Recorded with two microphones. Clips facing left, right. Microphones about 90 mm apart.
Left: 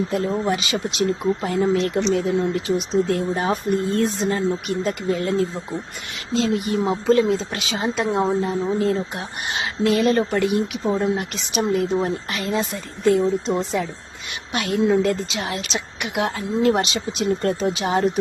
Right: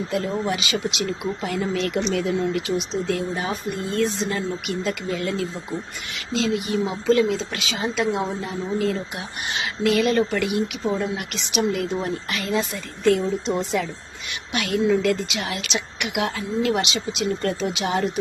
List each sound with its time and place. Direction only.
0.5 s speech: 35° left (ahead or behind)